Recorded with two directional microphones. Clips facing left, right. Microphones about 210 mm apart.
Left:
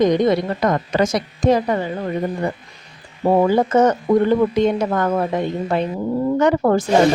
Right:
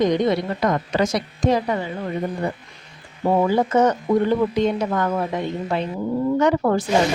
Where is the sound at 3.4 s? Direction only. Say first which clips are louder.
Left 3 dB; 50° left (ahead or behind).